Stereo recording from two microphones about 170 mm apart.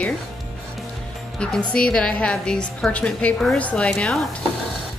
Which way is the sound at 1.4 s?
5° left (ahead or behind).